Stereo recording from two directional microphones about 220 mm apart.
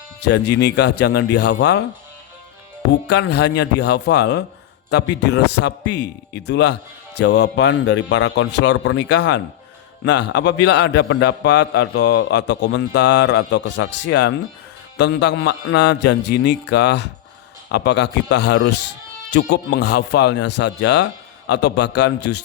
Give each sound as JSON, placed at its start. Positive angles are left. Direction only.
{"t": 0.2, "sound": "a man's voice", "side_deg": 50}
{"t": 3.1, "sound": "a man's voice", "side_deg": 50}